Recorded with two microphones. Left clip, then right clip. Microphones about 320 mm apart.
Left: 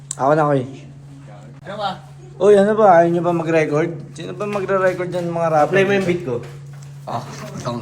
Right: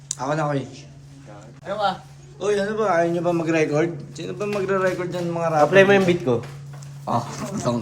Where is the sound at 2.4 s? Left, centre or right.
Centre.